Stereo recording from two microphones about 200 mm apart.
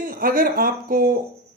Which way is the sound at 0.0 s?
45° right (ahead or behind).